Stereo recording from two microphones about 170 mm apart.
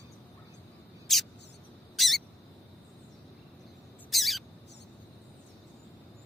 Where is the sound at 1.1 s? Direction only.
Centre (ahead or behind).